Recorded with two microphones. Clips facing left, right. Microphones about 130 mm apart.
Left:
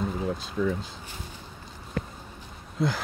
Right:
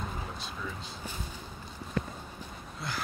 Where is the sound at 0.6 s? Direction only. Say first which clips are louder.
Left 15 dB; 70° left (ahead or behind).